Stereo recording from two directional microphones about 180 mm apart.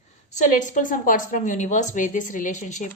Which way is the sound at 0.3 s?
40° left (ahead or behind).